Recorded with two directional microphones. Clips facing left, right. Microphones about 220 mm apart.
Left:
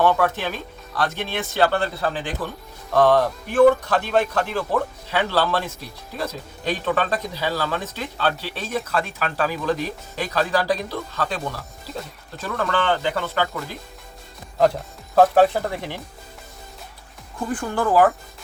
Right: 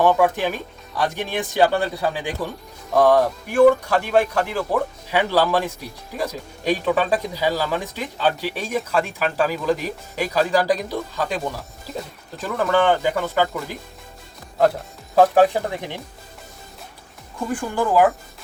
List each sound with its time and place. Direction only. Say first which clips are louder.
0.0 s speech: right 2 dB; 15° right (ahead or behind)
17.5 s speech: even; 15° right (ahead or behind)